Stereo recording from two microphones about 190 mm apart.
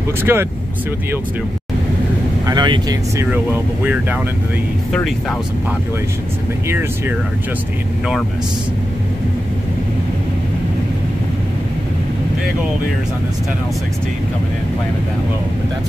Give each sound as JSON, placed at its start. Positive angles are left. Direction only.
{"t": 0.2, "sound": "speech", "side_deg": -10}
{"t": 2.4, "sound": "speech", "side_deg": -25}
{"t": 3.3, "sound": "speech", "side_deg": -5}